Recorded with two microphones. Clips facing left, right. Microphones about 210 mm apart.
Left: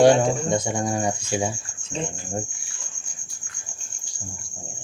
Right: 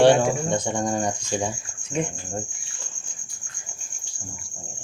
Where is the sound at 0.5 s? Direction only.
10° left (ahead or behind).